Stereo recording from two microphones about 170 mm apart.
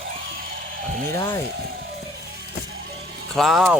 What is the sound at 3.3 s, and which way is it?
Speech, centre (ahead or behind).